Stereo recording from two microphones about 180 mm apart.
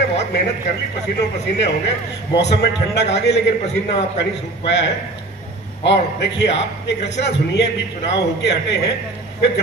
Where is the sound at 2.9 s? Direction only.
70° left (ahead or behind).